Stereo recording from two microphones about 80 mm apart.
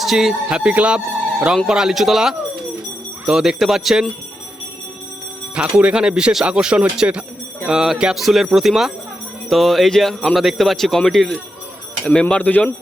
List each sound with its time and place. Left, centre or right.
0.0 s speech: centre
5.5 s speech: centre